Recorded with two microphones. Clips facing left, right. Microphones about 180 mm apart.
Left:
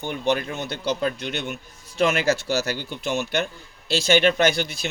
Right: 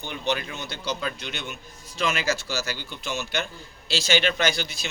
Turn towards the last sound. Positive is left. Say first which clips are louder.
# left 5 dB
turn(degrees=55)  # may be behind; listen again after turning